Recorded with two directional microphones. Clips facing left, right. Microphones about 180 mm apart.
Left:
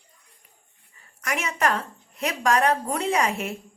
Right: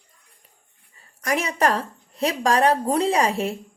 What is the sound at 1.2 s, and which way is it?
A woman's voice, 35° right (ahead or behind).